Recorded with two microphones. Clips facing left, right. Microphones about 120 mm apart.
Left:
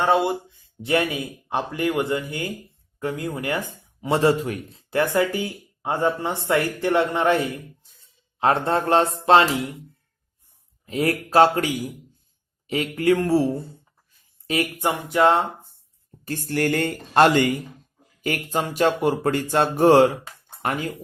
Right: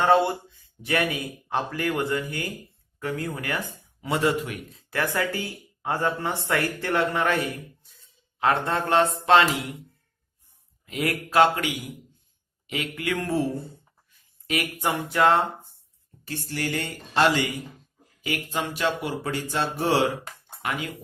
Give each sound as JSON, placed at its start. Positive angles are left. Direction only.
{"t": 0.1, "sound": "speech", "side_deg": 15}
{"t": 4.0, "sound": "a man's voice", "side_deg": 30}
{"t": 10.8, "sound": "a man's voice", "side_deg": 35}
{"t": 14.1, "sound": "a sound", "side_deg": 30}
{"t": 14.8, "sound": "speech", "side_deg": 20}
{"t": 16.2, "sound": "speech", "side_deg": 45}